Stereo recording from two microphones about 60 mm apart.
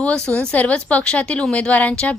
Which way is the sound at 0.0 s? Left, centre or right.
Left.